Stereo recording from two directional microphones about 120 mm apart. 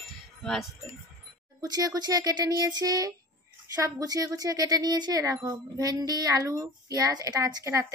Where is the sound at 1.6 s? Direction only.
30° right (ahead or behind).